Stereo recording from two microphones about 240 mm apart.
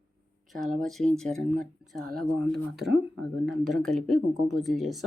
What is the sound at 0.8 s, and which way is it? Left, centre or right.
Speech, centre.